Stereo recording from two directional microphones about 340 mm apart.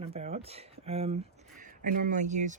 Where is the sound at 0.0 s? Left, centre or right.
Centre.